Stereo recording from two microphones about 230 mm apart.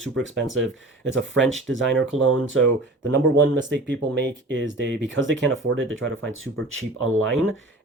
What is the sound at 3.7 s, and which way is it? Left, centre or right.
Speech, right.